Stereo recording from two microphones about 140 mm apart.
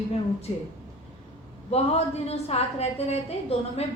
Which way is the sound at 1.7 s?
50° left (ahead or behind).